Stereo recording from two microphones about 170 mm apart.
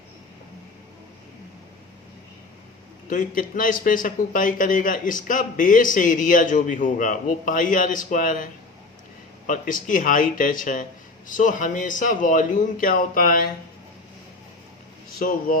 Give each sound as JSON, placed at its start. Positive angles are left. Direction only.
{"t": 3.1, "sound": "a man's voice", "side_deg": 50}
{"t": 9.5, "sound": "a man's voice", "side_deg": 50}
{"t": 15.2, "sound": "a man's voice", "side_deg": 55}